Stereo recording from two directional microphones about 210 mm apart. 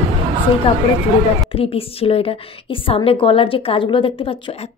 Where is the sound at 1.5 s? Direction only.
25° left (ahead or behind).